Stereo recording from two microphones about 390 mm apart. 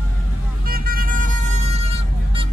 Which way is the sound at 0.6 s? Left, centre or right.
Right.